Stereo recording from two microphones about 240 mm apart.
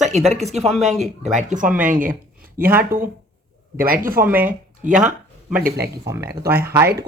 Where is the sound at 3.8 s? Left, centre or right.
Right.